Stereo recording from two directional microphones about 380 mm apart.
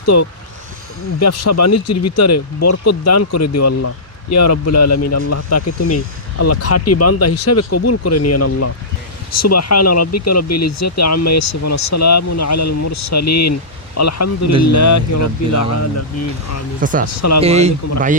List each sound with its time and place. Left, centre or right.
0.0 s speech: left
16.8 s speech: right
17.2 s speech: left
17.4 s speech: centre